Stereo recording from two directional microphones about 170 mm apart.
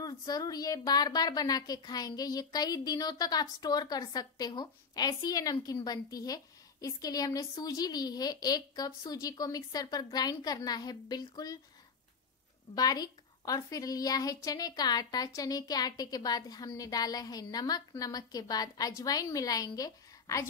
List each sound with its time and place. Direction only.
0.0 s speech: 20° left (ahead or behind)
12.7 s speech: 25° left (ahead or behind)